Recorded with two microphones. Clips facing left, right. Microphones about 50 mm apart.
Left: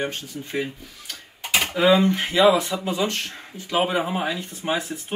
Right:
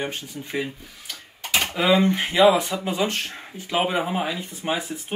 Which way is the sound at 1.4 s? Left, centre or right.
Centre.